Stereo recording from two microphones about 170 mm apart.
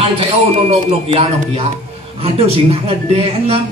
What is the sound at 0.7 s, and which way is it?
A man's voice, 35° right (ahead or behind).